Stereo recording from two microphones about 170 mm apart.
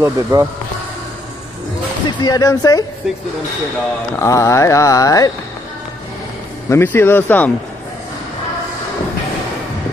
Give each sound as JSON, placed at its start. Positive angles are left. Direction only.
{"t": 0.0, "sound": "speech", "side_deg": -15}
{"t": 2.0, "sound": "speech", "side_deg": 20}
{"t": 4.2, "sound": "speech", "side_deg": 15}
{"t": 6.7, "sound": "speech", "side_deg": 15}